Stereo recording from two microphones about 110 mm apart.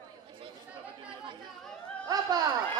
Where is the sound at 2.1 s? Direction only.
35° right (ahead or behind).